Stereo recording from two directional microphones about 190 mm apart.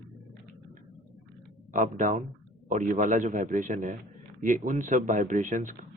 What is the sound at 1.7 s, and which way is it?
A man's voice, 40° right (ahead or behind).